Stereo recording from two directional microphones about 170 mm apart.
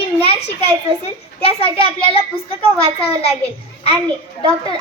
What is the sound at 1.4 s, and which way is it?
A child's voice, 35° left (ahead or behind).